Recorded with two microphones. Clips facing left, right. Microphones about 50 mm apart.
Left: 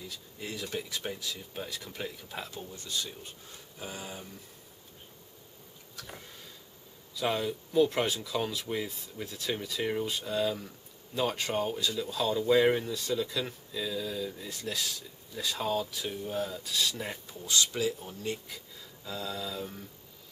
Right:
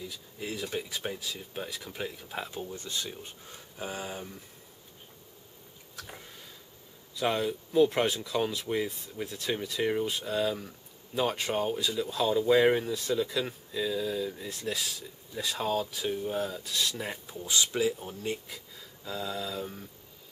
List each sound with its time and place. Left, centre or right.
0.0 s speech: centre
2.7 s speech: right
5.9 s a sound: centre
7.2 s speech: centre